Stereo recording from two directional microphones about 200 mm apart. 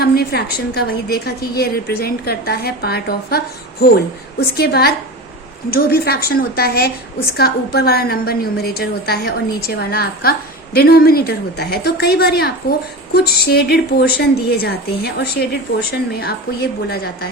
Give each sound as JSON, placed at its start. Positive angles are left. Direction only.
{"t": 0.0, "sound": "a woman's voice", "side_deg": 50}